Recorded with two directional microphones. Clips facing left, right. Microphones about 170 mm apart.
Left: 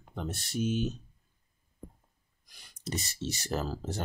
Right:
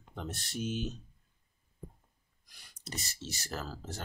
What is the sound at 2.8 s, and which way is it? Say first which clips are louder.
Speech: left 8 dB; 20° left (ahead or behind).